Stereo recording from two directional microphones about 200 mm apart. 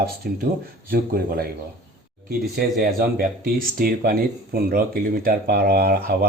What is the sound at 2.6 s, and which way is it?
Speech, 50° right (ahead or behind).